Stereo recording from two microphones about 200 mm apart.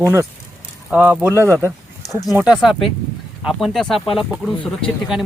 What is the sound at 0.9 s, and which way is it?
Speech, 5° right (ahead or behind).